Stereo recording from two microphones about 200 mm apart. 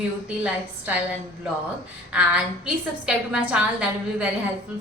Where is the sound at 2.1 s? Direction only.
5° right (ahead or behind).